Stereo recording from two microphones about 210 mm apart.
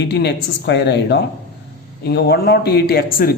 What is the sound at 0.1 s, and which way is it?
A woman's voice, 55° left (ahead or behind).